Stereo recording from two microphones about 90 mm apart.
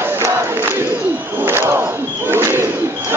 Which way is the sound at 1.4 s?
25° right (ahead or behind).